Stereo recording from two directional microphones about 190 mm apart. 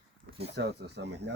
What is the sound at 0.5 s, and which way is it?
Speech, 65° right (ahead or behind).